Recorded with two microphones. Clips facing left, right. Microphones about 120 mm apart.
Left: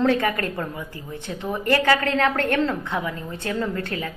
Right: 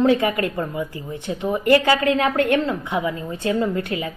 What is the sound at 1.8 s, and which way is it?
A woman's voice, 15° right (ahead or behind).